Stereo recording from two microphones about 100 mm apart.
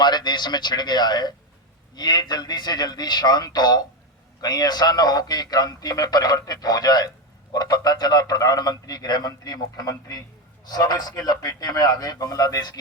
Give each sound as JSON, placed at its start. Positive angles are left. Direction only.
{"t": 0.0, "sound": "a man's voice", "side_deg": 45}